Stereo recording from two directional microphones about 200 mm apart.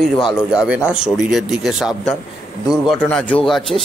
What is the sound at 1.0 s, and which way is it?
Speech, centre (ahead or behind).